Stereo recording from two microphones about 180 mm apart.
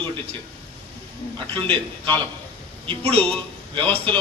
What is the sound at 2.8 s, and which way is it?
Speech, 30° right (ahead or behind).